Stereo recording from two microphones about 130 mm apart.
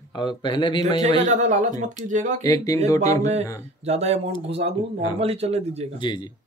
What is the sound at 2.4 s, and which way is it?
Speech, 25° left (ahead or behind).